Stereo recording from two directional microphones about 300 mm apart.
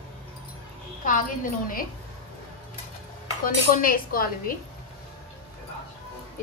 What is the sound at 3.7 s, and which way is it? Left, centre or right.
Speech, left.